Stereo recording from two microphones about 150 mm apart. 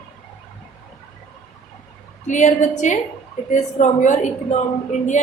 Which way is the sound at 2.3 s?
55° left (ahead or behind).